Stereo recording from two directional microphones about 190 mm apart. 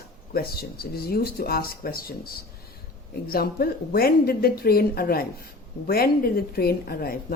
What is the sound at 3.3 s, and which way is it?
A woman's voice, 50° left (ahead or behind).